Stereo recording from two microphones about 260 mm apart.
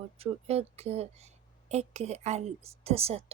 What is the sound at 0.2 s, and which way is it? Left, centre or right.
A woman's voice, right.